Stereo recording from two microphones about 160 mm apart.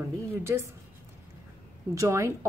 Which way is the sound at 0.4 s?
15° right (ahead or behind).